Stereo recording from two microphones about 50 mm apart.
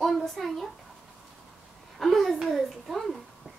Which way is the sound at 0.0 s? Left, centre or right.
Centre.